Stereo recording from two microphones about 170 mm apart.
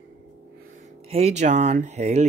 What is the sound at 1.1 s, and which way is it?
Speech, 40° right (ahead or behind).